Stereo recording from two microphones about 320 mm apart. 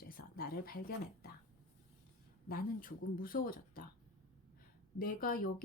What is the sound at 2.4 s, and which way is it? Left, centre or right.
Speech, left.